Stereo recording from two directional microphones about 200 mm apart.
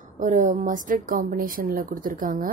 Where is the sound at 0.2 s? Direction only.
40° right (ahead or behind).